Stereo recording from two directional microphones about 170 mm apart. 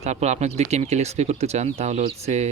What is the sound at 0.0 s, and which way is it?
Speech, 40° right (ahead or behind).